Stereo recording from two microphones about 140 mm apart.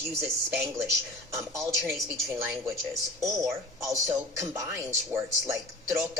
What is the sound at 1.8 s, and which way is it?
Speech, centre (ahead or behind).